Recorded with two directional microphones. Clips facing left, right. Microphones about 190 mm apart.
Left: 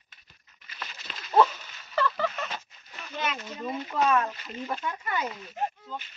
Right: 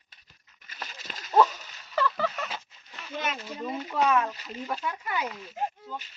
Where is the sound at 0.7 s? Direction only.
45° right (ahead or behind).